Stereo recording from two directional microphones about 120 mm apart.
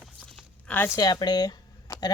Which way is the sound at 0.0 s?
Centre (ahead or behind).